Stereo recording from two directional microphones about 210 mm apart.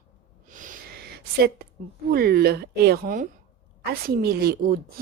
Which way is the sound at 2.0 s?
45° right (ahead or behind).